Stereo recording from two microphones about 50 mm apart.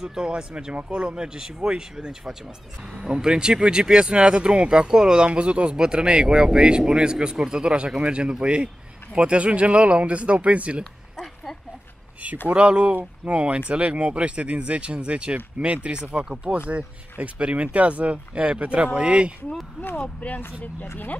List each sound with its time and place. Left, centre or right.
0.0 s speech: centre
10.8 s a sound: centre
12.4 s speech: right
20.0 s speech: left
20.8 s speech: left